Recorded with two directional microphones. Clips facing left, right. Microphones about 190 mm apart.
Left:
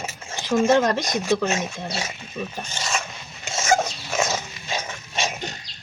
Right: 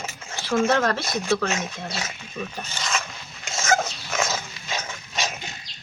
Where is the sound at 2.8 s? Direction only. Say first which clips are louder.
Left 1 dB; 25° left (ahead or behind).